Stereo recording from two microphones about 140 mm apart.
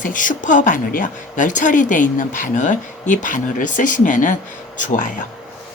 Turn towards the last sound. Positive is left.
turn(degrees=65)  # may be behind; listen again after turning